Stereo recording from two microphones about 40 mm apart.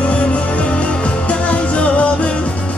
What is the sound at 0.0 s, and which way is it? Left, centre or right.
Music, left.